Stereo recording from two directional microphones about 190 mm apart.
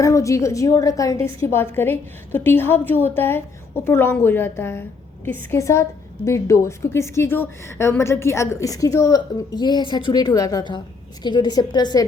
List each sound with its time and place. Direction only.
0.0 s a woman's voice: 15° left (ahead or behind)